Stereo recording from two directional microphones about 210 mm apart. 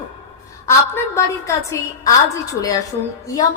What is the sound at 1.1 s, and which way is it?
A woman's voice, 15° left (ahead or behind).